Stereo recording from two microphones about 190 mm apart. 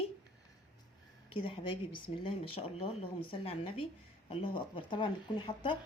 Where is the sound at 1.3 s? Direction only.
25° left (ahead or behind).